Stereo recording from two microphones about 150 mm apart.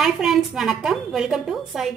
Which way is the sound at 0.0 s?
Centre (ahead or behind).